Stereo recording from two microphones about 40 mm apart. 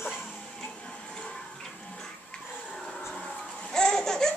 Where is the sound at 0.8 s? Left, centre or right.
Left.